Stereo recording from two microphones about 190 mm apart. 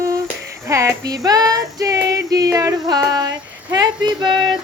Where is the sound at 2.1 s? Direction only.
20° right (ahead or behind).